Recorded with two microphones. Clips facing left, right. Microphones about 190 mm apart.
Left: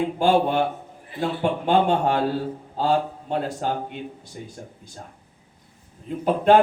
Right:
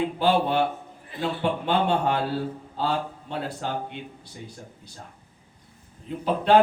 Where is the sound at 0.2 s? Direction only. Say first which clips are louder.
Left 3 dB; 50° left (ahead or behind).